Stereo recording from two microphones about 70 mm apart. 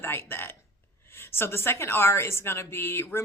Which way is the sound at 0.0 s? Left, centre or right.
Left.